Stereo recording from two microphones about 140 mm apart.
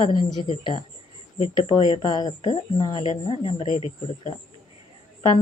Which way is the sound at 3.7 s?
55° left (ahead or behind).